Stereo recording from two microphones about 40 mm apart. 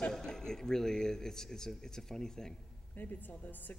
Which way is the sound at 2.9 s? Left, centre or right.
Left.